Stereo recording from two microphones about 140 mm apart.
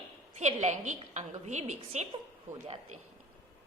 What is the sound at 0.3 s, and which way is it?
A woman's voice, 55° right (ahead or behind).